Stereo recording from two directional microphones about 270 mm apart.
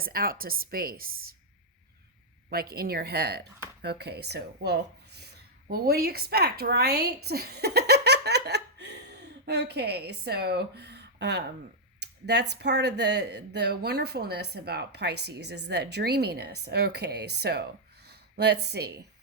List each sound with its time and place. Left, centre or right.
0.0 s speech: right
2.5 s speech: right
7.3 s laughter: right
11.9 s speech: right